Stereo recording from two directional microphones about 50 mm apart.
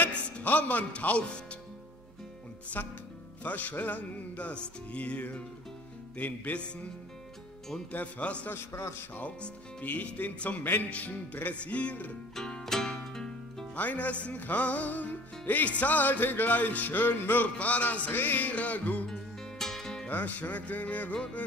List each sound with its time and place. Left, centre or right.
0.0 s a man's voice: left
2.7 s music: left
4.6 s speech: left
6.1 s music: left
7.9 s speech: left
8.5 s a man's voice: left
9.4 s speech: left
12.4 s music: centre
13.7 s music: left
17.6 s speech: left
18.1 s music: left
19.6 s music: centre
20.1 s music: left